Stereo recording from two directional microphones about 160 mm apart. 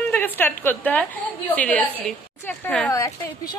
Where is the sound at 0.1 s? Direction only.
10° left (ahead or behind).